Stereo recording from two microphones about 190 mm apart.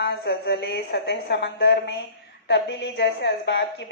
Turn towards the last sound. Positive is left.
turn(degrees=65)  # may be behind; listen again after turning